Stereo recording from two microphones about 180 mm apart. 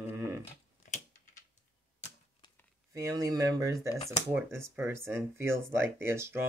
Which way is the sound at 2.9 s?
20° right (ahead or behind).